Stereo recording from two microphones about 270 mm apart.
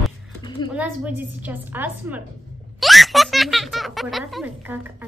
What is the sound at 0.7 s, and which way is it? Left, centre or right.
A woman's voice, centre.